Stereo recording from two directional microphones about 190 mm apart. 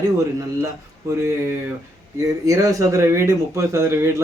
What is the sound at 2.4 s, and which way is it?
Speech, 15° right (ahead or behind).